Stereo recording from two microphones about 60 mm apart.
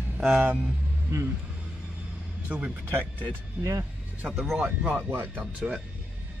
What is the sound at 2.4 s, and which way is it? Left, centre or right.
Speech, right.